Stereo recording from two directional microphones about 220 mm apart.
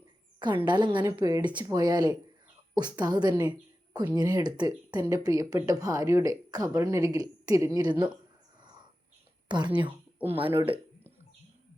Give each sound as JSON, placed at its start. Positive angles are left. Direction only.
{"t": 0.3, "sound": "a woman's voice", "side_deg": -20}
{"t": 9.5, "sound": "speech", "side_deg": -20}